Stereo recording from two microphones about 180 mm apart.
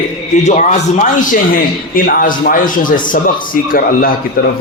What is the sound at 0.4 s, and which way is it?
A man's voice, 40° left (ahead or behind).